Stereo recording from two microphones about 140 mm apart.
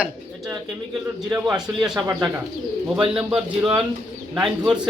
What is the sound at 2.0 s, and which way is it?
A man's voice, 20° right (ahead or behind).